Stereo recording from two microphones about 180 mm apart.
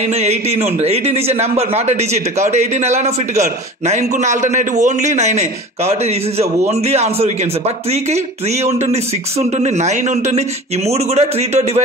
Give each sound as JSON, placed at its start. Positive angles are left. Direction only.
{"t": 0.2, "sound": "a man's voice", "side_deg": -35}
{"t": 8.6, "sound": "a man's voice", "side_deg": -35}